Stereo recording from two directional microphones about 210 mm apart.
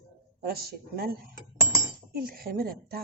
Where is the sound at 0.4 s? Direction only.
45° right (ahead or behind).